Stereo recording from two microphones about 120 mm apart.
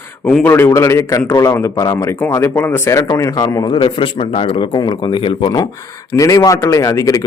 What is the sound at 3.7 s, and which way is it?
A man's voice, 40° left (ahead or behind).